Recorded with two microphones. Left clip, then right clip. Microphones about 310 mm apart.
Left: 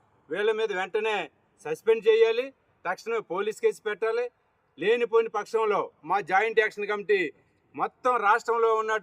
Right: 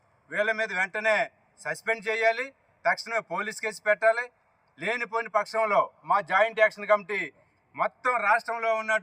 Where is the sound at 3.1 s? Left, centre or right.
Right.